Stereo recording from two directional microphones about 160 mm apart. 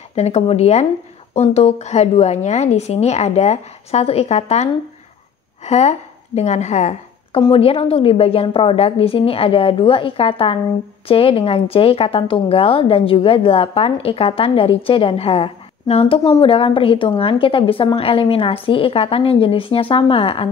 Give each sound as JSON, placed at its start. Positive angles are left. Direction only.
{"t": 0.1, "sound": "a woman's voice", "side_deg": 40}
{"t": 7.3, "sound": "speech", "side_deg": 35}